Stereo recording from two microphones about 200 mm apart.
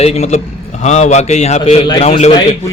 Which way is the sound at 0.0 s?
35° left (ahead or behind).